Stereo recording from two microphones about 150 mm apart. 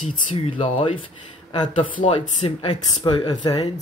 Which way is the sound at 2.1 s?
35° left (ahead or behind).